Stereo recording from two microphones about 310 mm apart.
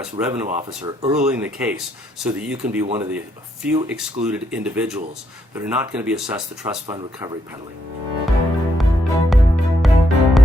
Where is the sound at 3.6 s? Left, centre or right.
Centre.